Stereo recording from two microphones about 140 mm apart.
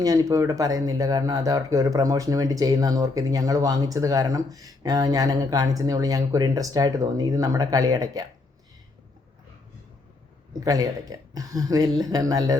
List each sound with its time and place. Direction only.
0.0 s speech: 25° right (ahead or behind)
10.6 s speech: 25° right (ahead or behind)